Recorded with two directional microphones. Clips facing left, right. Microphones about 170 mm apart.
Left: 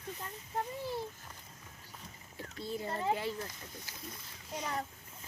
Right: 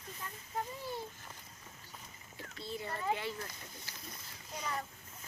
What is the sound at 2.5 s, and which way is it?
Speech, 45° left (ahead or behind).